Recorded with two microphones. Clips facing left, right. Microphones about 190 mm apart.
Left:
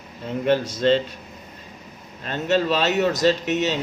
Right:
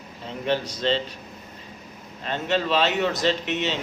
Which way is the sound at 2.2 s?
45° left (ahead or behind).